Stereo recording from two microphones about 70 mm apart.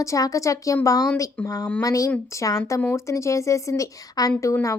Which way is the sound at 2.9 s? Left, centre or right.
Left.